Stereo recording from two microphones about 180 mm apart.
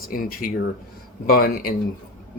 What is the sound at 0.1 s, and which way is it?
Speech, 50° left (ahead or behind).